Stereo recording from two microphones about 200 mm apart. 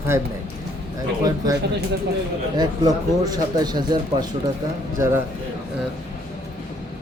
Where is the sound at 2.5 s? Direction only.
20° right (ahead or behind).